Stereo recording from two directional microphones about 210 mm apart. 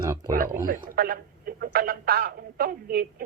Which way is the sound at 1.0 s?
45° right (ahead or behind).